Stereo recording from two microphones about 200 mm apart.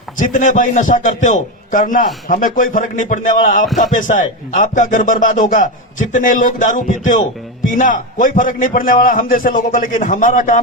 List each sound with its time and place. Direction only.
0.2 s a man's voice: 40° left (ahead or behind)